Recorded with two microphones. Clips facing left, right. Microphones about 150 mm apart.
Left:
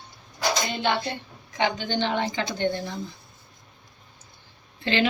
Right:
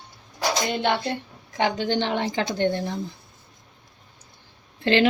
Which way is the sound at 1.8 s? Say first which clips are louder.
Right 2 dB; 65° right (ahead or behind).